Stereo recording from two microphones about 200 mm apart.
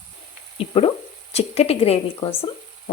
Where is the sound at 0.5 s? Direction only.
30° left (ahead or behind).